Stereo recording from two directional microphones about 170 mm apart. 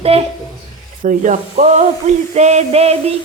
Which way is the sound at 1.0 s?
50° right (ahead or behind).